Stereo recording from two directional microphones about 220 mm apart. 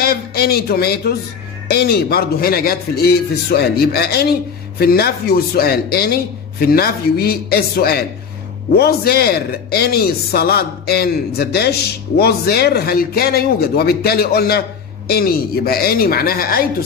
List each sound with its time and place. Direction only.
0.0 s a man's voice: 45° left (ahead or behind)